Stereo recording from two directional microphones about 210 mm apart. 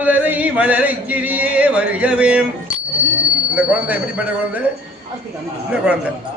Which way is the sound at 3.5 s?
5° right (ahead or behind).